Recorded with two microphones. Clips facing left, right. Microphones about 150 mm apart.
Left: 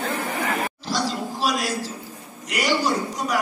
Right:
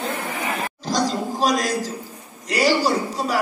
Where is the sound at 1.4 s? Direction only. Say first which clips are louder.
Right 4 dB; 45° right (ahead or behind).